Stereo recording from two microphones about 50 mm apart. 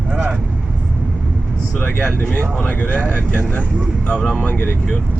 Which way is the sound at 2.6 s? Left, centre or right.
Left.